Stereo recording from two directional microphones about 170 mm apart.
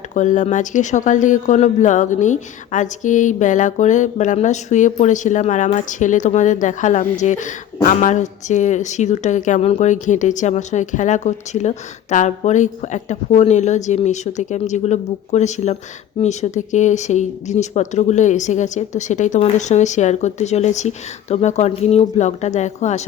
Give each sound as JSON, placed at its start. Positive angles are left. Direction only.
{"t": 0.1, "sound": "speech", "side_deg": 45}